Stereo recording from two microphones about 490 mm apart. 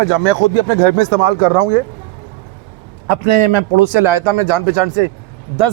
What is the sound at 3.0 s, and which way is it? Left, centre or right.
A man's voice, right.